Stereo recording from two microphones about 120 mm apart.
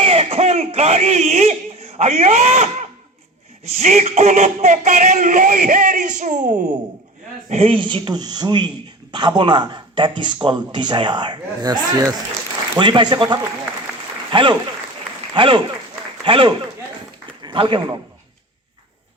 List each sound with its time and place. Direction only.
0.0 s speech: 50° right (ahead or behind); by 2.9 s 65° right (ahead or behind)
3.8 s speech: 80° right
7.5 s a man's voice: 50° right (ahead or behind)